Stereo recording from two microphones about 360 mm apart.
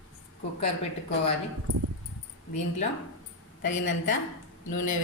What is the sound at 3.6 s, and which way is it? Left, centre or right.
Speech, left.